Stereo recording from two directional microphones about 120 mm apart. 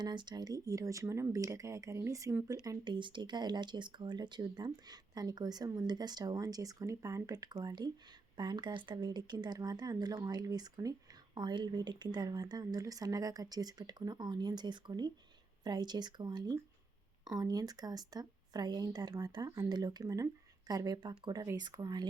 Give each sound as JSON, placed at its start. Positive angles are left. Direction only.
{"t": 0.0, "sound": "speech", "side_deg": -40}
{"t": 2.6, "sound": "speech", "side_deg": -40}